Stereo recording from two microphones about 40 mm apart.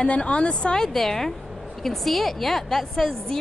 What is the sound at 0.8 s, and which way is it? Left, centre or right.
A woman's voice, centre.